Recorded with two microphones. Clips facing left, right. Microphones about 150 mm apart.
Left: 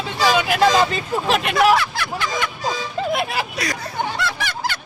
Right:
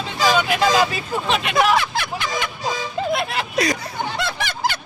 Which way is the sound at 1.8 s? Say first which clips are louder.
Right 1 dB; 20° right (ahead or behind).